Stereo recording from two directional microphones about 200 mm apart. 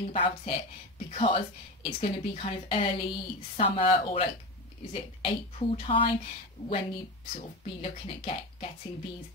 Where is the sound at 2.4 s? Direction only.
30° left (ahead or behind).